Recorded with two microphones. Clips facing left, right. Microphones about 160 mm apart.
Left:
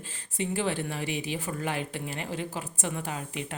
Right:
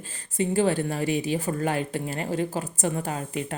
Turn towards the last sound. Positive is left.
turn(degrees=-40)  # may be behind; listen again after turning